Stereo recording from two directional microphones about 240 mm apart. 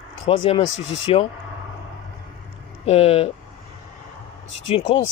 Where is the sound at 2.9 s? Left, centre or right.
Left.